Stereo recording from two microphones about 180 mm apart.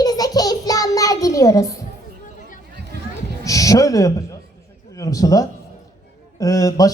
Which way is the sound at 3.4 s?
20° left (ahead or behind).